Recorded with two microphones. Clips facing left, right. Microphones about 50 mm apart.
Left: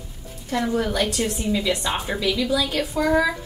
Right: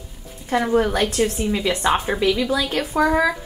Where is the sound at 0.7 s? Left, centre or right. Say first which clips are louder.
Right 5 dB; right.